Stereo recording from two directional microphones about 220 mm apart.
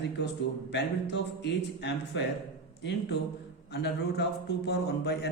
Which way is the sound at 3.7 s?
50° left (ahead or behind).